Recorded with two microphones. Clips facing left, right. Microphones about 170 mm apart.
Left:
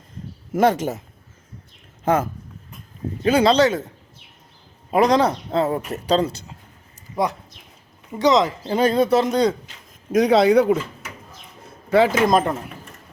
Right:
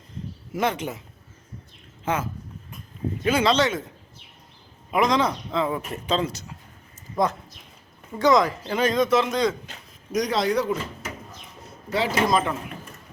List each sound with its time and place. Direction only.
0.5 s speech: 45° left (ahead or behind)
3.2 s speech: 35° left (ahead or behind)
4.9 s speech: 35° left (ahead or behind)
8.2 s speech: 20° left (ahead or behind)
8.7 s speech: 35° left (ahead or behind)
10.1 s speech: 60° left (ahead or behind)
11.9 s speech: 50° left (ahead or behind)